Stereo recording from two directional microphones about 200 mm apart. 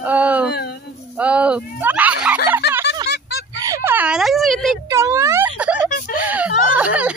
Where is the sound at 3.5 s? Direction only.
15° right (ahead or behind); by 4.7 s centre (ahead or behind).